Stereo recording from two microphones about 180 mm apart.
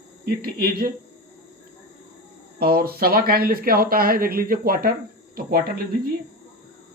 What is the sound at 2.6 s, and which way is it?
Speech, 55° right (ahead or behind).